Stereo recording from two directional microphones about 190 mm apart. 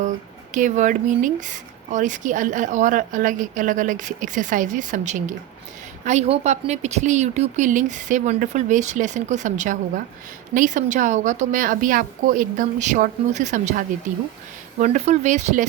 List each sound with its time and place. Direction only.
0.5 s a woman's voice: 40° right (ahead or behind)